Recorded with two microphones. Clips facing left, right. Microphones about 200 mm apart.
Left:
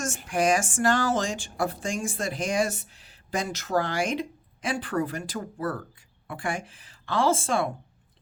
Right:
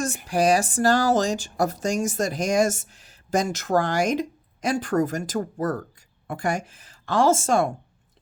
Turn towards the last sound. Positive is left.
turn(degrees=-45)  # may be behind; listen again after turning